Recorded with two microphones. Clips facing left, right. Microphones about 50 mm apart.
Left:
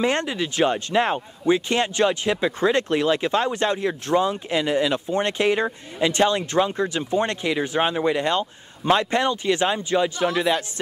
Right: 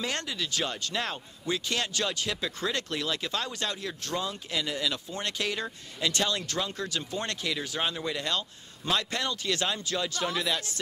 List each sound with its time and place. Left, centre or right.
0.0 s speech: left